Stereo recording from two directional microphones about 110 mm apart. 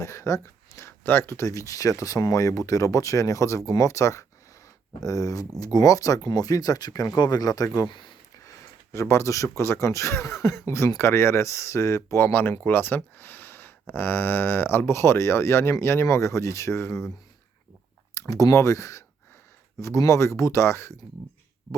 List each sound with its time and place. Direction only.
0.0 s speech: 30° left (ahead or behind); by 8.1 s 45° left (ahead or behind)
8.4 s speech: 25° left (ahead or behind)
18.1 s speech: 30° left (ahead or behind)